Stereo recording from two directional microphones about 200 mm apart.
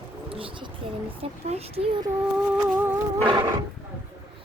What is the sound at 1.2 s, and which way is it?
Speech, 30° right (ahead or behind).